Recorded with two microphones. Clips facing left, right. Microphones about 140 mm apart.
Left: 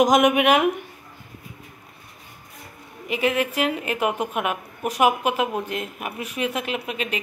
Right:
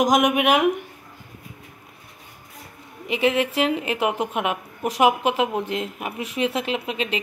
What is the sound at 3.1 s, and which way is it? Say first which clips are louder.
A woman's voice: right 2 dB; 25° right (ahead or behind).